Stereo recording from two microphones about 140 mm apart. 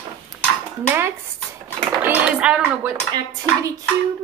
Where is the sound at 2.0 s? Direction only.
5° right (ahead or behind).